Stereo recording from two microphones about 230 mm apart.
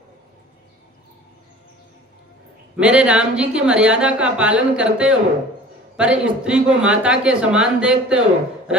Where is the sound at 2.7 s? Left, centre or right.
Centre.